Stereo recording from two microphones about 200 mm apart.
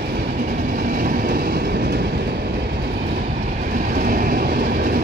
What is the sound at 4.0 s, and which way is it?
Train, 45° right (ahead or behind).